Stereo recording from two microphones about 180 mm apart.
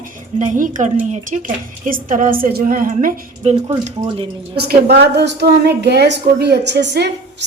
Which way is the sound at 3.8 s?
30° right (ahead or behind).